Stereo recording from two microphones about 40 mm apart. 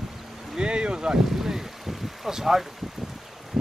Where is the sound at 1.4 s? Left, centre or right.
Centre.